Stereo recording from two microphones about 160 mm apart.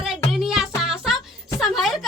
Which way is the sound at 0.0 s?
5° right (ahead or behind).